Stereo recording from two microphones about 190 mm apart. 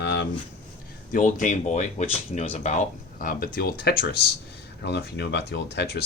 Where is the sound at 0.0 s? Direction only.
65° left (ahead or behind).